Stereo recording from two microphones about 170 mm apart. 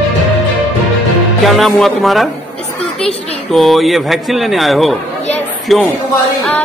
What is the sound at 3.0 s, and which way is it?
Speech, 35° left (ahead or behind).